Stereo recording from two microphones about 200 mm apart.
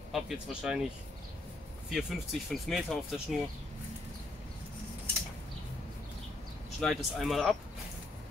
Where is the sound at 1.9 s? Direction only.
Centre (ahead or behind).